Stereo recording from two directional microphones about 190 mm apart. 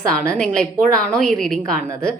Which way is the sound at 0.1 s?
5° left (ahead or behind).